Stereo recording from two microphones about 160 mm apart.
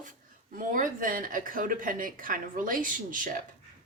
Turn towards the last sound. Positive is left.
turn(degrees=-60)  # may be behind; listen again after turning